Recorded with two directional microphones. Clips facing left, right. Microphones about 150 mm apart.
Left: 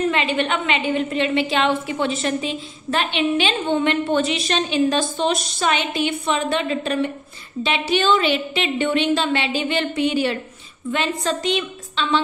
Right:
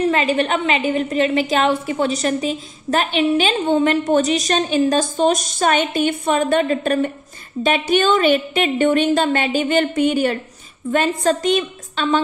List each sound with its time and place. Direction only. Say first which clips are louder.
0.1 s a woman's voice: right 3 dB; 40° right (ahead or behind)